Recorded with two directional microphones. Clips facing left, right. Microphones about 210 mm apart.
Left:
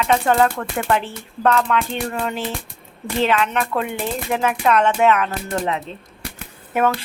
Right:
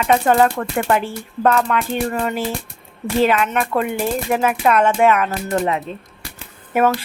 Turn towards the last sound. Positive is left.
turn(degrees=-10)  # may be behind; listen again after turning